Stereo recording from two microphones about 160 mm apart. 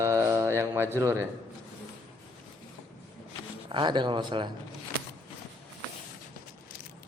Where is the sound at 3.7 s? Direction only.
30° right (ahead or behind).